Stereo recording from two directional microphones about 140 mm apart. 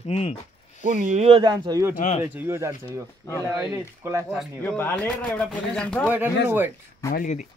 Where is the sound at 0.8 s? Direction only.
55° right (ahead or behind); by 1.8 s 30° right (ahead or behind).